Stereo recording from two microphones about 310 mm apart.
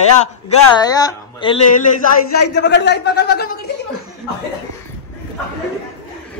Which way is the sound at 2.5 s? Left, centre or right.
Left.